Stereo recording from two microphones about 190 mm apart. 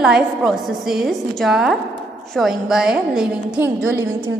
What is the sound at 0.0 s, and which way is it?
A woman's voice, centre (ahead or behind).